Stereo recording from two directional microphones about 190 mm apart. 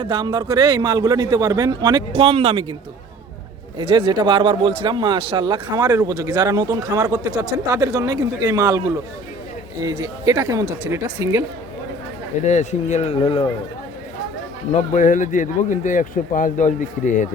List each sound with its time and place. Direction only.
0.0 s speech: 25° right (ahead or behind)
3.8 s speech: 25° right (ahead or behind)
9.8 s speech: 20° right (ahead or behind)
12.5 s speech: 35° left (ahead or behind)
14.7 s speech: 40° left (ahead or behind)